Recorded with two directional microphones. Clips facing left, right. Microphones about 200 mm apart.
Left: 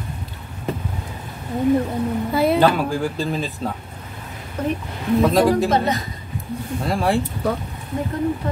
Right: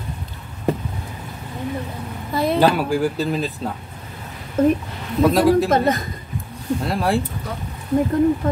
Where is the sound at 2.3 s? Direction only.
Centre (ahead or behind).